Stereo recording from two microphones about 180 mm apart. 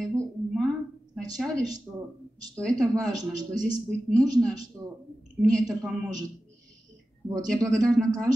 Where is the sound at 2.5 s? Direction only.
Centre (ahead or behind).